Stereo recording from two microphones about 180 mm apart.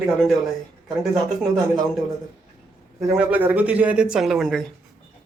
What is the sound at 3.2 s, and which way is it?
Speech, 10° right (ahead or behind).